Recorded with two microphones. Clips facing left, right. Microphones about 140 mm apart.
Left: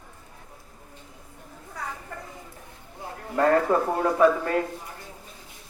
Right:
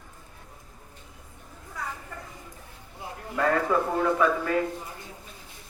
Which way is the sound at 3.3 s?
40° left (ahead or behind).